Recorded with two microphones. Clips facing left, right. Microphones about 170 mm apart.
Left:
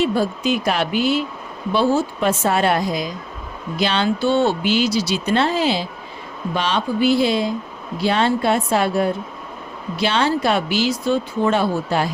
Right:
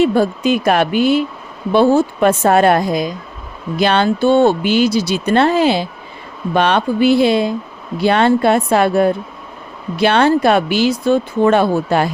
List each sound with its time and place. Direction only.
0.0 s speech: 55° right (ahead or behind)